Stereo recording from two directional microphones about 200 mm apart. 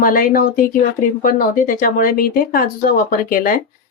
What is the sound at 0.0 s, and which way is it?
Speech, 45° left (ahead or behind).